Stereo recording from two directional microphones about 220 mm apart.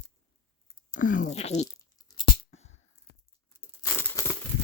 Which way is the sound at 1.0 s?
35° left (ahead or behind).